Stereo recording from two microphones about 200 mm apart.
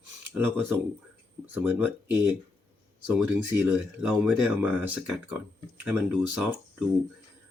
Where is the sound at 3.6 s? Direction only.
10° right (ahead or behind).